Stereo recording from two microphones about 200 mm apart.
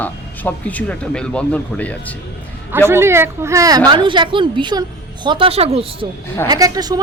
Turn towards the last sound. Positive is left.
turn(degrees=-20)  # may be behind; listen again after turning